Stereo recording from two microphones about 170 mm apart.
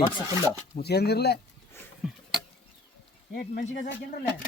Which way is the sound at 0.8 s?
70° left (ahead or behind).